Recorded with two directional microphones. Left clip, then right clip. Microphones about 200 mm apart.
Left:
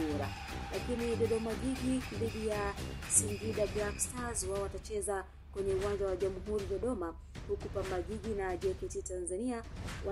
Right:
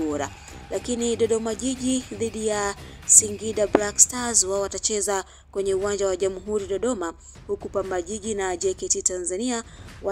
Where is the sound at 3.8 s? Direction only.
35° right (ahead or behind).